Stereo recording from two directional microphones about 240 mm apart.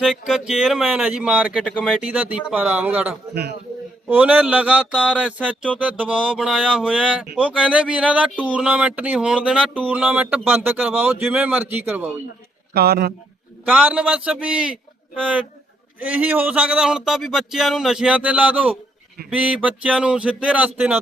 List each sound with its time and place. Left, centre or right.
0.0 s speech: centre
12.7 s a man's voice: right
13.7 s speech: centre
16.0 s speech: centre